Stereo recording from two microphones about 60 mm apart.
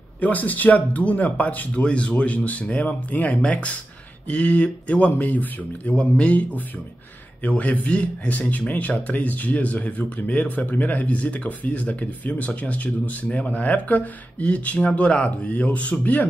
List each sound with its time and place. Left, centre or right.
0.2 s speech: left